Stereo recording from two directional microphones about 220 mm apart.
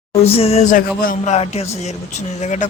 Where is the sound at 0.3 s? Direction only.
25° left (ahead or behind).